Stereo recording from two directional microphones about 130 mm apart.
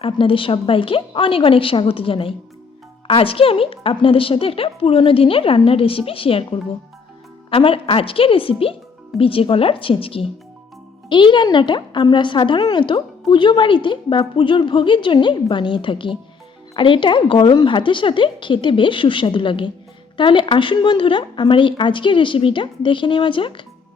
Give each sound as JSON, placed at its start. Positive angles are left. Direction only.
{"t": 0.0, "sound": "a woman's voice", "side_deg": 45}